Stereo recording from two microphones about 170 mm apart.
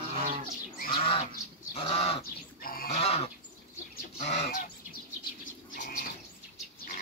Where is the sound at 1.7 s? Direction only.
35° left (ahead or behind).